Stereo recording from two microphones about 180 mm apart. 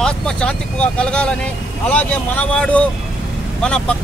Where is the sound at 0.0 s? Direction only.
5° left (ahead or behind).